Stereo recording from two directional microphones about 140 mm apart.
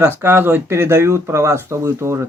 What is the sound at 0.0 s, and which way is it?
Speech, 15° right (ahead or behind).